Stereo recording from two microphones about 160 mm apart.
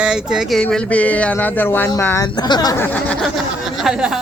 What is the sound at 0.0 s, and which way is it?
Speech, 5° right (ahead or behind).